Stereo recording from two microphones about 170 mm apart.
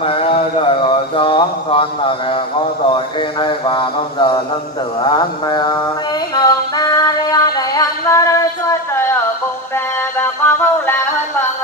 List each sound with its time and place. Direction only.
0.0 s a sound: 30° left (ahead or behind)
2.9 s mantra: 30° left (ahead or behind)
5.0 s speech: 25° left (ahead or behind)
6.3 s female singing: 20° left (ahead or behind)
10.1 s music: 10° left (ahead or behind)